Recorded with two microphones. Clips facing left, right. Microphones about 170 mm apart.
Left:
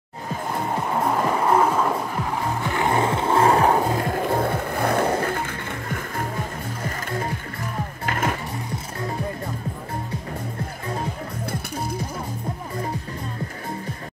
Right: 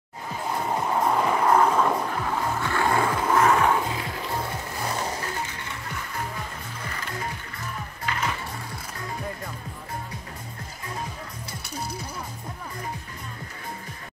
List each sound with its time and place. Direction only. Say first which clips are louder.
1.2 s music: left 1 dB; 5° left (ahead or behind)
2.6 s music: left 3 dB; 20° left (ahead or behind); by 8.4 s 50° left (ahead or behind)